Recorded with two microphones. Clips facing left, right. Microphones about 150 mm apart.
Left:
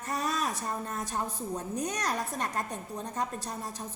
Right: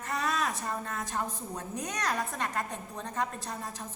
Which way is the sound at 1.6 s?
35° left (ahead or behind).